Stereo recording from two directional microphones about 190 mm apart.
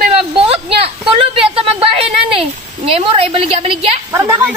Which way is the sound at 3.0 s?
30° right (ahead or behind).